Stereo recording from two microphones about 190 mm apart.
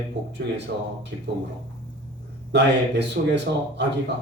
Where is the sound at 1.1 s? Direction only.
70° right (ahead or behind).